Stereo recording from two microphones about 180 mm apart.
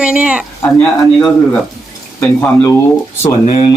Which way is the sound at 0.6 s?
5° left (ahead or behind).